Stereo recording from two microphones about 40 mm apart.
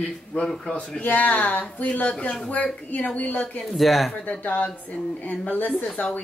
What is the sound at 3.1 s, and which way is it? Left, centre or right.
Speech, left.